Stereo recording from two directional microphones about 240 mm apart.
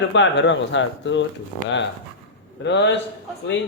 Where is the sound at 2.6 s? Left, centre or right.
Left.